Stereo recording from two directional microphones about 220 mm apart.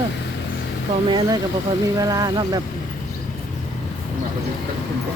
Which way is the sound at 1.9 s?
15° right (ahead or behind).